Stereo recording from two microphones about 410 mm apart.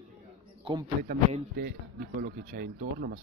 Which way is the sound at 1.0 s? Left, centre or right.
Right.